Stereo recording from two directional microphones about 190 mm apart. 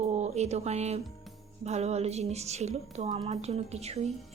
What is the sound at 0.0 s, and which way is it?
A woman's voice, 35° right (ahead or behind).